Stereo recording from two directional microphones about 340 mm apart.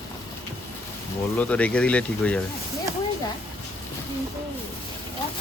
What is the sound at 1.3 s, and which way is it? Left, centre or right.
Speech, centre.